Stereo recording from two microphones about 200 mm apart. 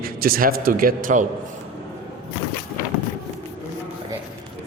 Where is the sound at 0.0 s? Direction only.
45° right (ahead or behind).